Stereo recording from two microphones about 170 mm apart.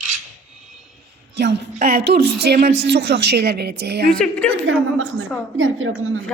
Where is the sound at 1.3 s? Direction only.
90° right.